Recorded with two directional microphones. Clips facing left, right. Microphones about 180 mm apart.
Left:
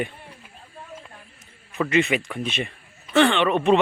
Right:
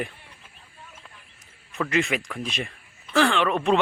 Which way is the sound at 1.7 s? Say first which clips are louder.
Left 4 dB; centre (ahead or behind).